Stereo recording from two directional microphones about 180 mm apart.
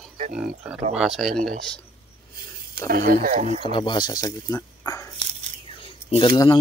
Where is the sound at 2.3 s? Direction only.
55° right (ahead or behind).